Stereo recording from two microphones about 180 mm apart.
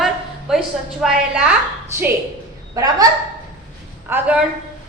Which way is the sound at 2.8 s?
20° right (ahead or behind).